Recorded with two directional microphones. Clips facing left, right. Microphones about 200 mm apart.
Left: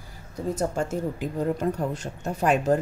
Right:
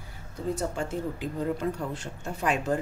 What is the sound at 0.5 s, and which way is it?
A woman's voice, 45° left (ahead or behind).